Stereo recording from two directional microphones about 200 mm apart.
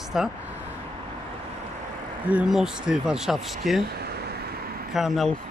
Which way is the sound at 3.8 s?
50° right (ahead or behind).